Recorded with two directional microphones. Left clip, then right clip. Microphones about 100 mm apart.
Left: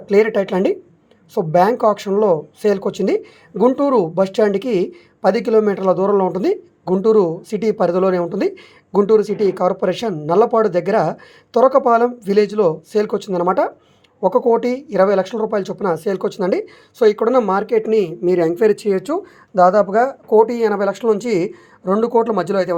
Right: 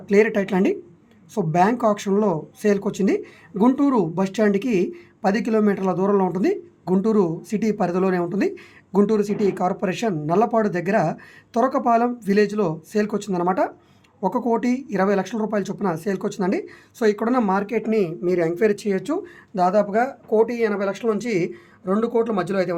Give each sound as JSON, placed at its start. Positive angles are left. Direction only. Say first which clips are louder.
{"t": 0.0, "sound": "speech", "louder": "left 4 dB", "side_deg": 25}